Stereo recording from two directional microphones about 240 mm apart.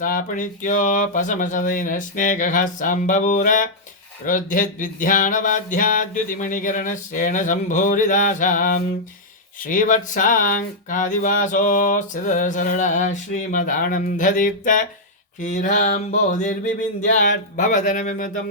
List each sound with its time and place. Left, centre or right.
0.0 s speech: left